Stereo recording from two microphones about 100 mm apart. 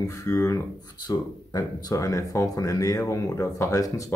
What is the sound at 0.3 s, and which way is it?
Speech, 30° left (ahead or behind).